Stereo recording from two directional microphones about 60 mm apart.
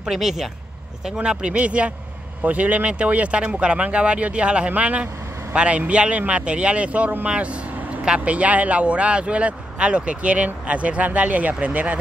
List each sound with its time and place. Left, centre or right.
0.0 s speech: centre; by 12.0 s right